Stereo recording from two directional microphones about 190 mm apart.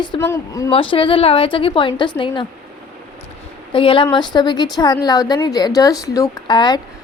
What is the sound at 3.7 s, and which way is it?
A woman's voice, 25° left (ahead or behind).